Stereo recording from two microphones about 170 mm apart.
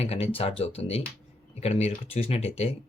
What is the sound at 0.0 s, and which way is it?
Speech, 35° left (ahead or behind).